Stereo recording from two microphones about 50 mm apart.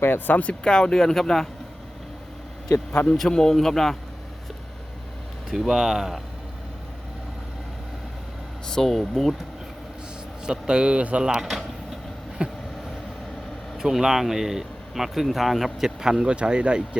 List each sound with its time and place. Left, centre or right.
0.0 s speech: left
0.6 s speech: centre
3.2 s speech: centre
5.5 s speech: centre
8.6 s speech: centre
10.4 s a man's voice: centre
11.2 s a sound: centre
12.4 s vehicle: centre
13.7 s speech: centre